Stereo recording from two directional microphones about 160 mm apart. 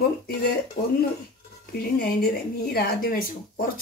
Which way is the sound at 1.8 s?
70° left (ahead or behind).